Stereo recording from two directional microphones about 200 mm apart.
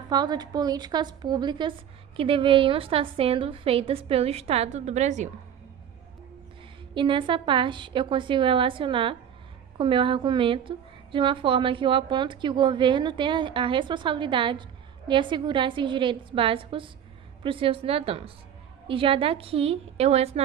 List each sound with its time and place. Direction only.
0.1 s a woman's voice: 20° right (ahead or behind); by 5.3 s 35° right (ahead or behind)
6.9 s a woman's voice: 25° right (ahead or behind)